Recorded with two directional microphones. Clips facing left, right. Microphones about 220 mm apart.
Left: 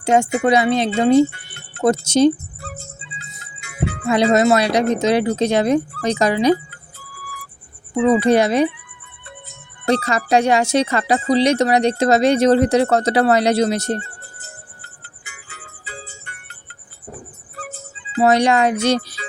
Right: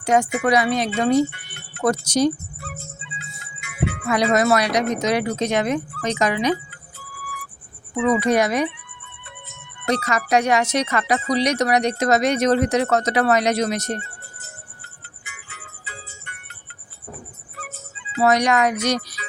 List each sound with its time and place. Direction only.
0.0 s speech: 25° left (ahead or behind)
7.9 s speech: 30° left (ahead or behind)
9.8 s speech: 30° left (ahead or behind)
15.2 s music: 30° left (ahead or behind)
17.6 s music: 30° left (ahead or behind)